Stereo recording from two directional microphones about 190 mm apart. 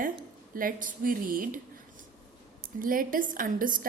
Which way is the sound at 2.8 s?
45° right (ahead or behind).